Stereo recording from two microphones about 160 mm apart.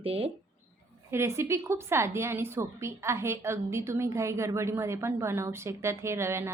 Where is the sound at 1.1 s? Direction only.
15° right (ahead or behind).